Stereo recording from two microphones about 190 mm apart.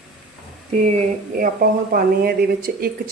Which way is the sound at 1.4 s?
50° right (ahead or behind).